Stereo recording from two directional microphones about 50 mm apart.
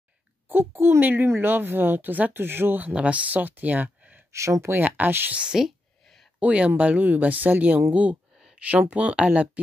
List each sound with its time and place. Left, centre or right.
0.5 s a woman's voice: right
2.4 s a woman's voice: right
2.9 s speech: right
4.3 s speech: right
4.7 s speech: right
5.3 s speech: right